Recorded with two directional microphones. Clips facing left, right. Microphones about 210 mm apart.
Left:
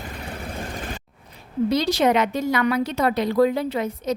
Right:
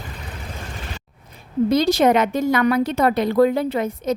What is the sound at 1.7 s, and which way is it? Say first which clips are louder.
A woman's voice: right 4 dB; 45° right (ahead or behind).